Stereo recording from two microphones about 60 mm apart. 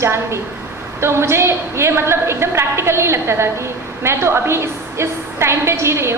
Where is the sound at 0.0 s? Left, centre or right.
Right.